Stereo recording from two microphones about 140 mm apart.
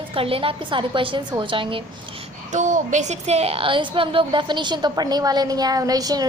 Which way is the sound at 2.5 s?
65° right (ahead or behind).